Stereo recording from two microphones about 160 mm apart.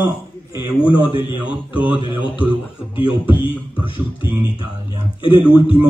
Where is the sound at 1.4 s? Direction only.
10° right (ahead or behind).